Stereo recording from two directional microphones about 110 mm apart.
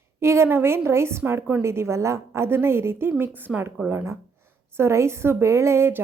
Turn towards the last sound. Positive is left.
turn(degrees=-20)  # may be behind; listen again after turning